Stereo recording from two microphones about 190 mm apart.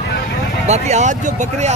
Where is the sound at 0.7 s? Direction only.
35° right (ahead or behind).